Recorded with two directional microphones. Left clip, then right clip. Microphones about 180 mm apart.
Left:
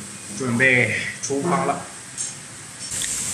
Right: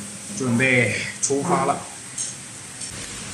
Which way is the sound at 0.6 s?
10° right (ahead or behind).